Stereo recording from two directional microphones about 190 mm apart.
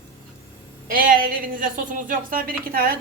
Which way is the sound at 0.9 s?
50° right (ahead or behind).